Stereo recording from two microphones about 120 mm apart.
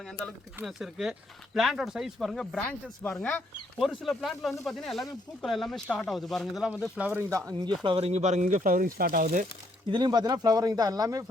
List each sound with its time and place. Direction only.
0.0 s speech: centre (ahead or behind)
2.6 s speech: 10° left (ahead or behind); by 7.3 s 10° right (ahead or behind)
7.3 s speech: 25° right (ahead or behind)
7.9 s speech: 55° right (ahead or behind); by 9.5 s 90° right
9.9 s speech: 35° right (ahead or behind)